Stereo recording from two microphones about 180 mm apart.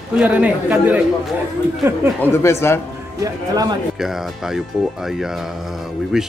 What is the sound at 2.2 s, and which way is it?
Speech, 15° left (ahead or behind).